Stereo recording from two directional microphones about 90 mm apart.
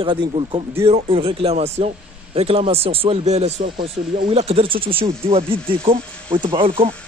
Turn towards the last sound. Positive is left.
turn(degrees=-90)